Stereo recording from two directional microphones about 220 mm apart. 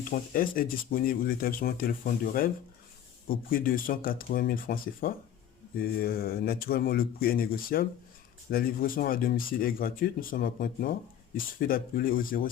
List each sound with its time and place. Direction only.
0.1 s speech: 40° left (ahead or behind)